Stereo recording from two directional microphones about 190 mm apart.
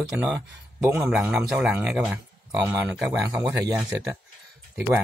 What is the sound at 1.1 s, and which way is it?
Speech, centre (ahead or behind).